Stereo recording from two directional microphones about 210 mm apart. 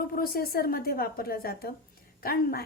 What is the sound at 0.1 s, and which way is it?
A woman's voice, 45° left (ahead or behind).